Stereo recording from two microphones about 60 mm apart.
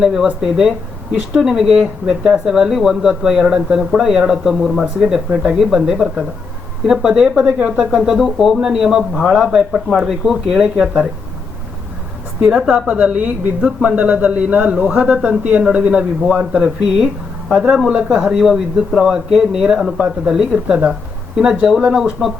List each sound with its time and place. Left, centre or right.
0.0 s speech: centre
4.6 s speech: centre
5.0 s speech: centre
7.9 s speech: centre
12.5 s a man's voice: centre